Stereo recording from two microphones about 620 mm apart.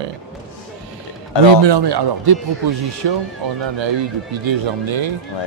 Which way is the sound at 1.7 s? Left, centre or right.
Right.